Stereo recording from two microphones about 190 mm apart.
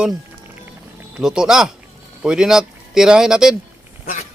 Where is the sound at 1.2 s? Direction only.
5° right (ahead or behind).